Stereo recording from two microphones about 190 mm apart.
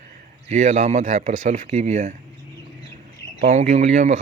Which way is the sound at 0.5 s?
35° right (ahead or behind).